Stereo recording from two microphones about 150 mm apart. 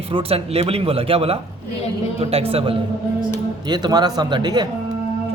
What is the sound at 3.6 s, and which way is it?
Speech, 30° right (ahead or behind).